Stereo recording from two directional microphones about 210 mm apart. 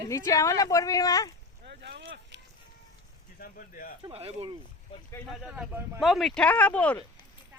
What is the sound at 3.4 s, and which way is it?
Speech, 45° left (ahead or behind).